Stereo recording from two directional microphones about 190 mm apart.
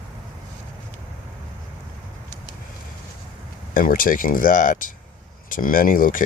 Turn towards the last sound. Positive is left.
turn(degrees=45)  # may be behind; listen again after turning